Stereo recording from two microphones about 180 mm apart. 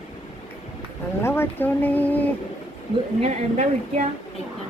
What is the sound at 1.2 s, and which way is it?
Speech, 15° left (ahead or behind).